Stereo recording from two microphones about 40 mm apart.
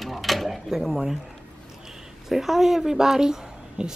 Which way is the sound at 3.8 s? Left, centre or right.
Right.